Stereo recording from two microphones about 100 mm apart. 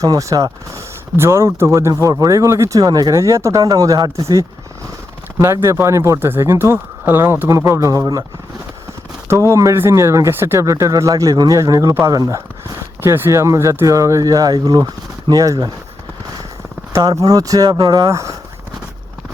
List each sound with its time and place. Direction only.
0.0 s speech: 35° right (ahead or behind)
5.4 s speech: 25° right (ahead or behind)
9.3 s speech: 30° right (ahead or behind)
13.0 s speech: 20° right (ahead or behind)
17.0 s speech: 35° right (ahead or behind)
18.1 s speech: 30° right (ahead or behind)